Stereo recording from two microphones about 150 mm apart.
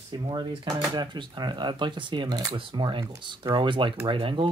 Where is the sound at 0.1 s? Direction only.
30° right (ahead or behind).